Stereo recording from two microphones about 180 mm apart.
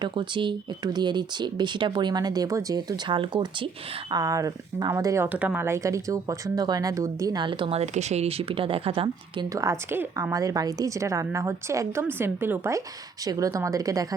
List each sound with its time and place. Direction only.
0.0 s speech: 25° right (ahead or behind)
9.6 s a woman's voice: 15° right (ahead or behind)